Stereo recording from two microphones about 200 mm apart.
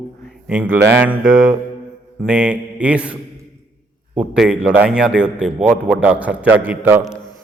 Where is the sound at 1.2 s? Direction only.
45° right (ahead or behind).